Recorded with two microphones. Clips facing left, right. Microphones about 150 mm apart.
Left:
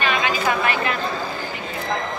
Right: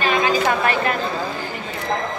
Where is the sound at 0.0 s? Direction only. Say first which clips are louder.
Right 3 dB; 40° right (ahead or behind).